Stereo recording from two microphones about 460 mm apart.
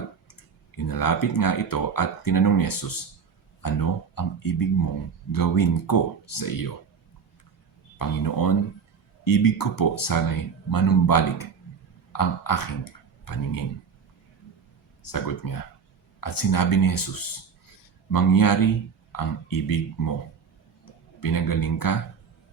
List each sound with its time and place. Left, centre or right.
0.9 s speech: left
7.9 s speech: left
15.0 s speech: left
21.2 s speech: left